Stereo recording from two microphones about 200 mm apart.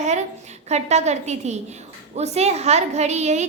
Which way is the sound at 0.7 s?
35° right (ahead or behind).